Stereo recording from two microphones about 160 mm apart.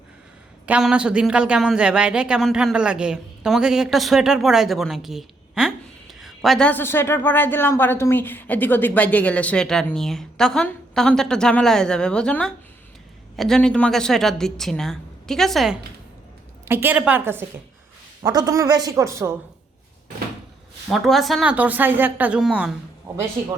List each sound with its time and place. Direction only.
0.6 s speech: 5° right (ahead or behind)
16.6 s a woman's voice: 15° right (ahead or behind)
20.9 s a woman's voice: centre (ahead or behind)